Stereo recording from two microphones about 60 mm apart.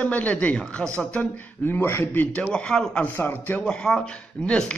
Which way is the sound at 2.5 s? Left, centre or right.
Centre.